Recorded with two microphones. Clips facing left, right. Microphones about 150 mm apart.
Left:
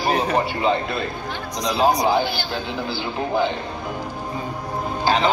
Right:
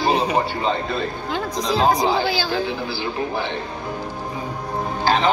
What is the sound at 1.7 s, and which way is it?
Speech, 90° right.